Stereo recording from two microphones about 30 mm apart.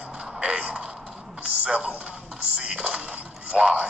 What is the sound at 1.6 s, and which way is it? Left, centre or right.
Speech, right.